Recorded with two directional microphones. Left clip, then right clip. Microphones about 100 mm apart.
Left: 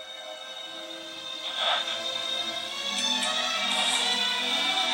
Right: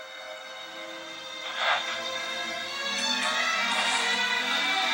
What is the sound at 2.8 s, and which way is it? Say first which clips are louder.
Music: even; 45° left (ahead or behind).